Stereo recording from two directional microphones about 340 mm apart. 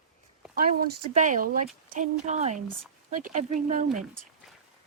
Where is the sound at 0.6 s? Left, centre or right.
Right.